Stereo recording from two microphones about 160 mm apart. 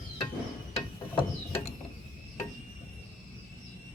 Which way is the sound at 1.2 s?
35° left (ahead or behind).